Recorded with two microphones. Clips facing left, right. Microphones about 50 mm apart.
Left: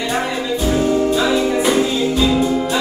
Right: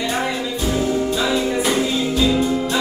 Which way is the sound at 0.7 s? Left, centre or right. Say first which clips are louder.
Left 4 dB; centre.